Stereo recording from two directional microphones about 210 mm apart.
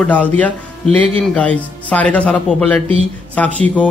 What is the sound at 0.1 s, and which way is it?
A man's voice, 5° left (ahead or behind).